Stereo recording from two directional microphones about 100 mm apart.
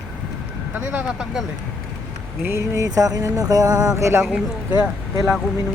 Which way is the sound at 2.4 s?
30° right (ahead or behind).